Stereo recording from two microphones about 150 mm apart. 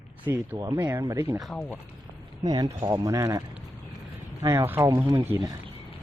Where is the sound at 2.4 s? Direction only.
25° right (ahead or behind).